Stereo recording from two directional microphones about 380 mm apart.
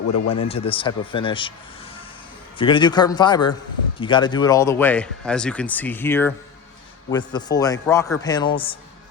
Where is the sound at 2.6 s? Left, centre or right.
Centre.